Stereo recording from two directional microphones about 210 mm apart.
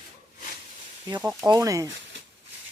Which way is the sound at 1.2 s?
15° right (ahead or behind).